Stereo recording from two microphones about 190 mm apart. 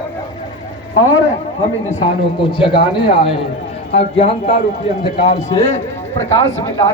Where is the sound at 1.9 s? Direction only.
35° left (ahead or behind).